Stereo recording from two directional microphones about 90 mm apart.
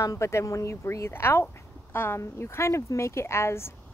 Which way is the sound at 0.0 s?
35° left (ahead or behind).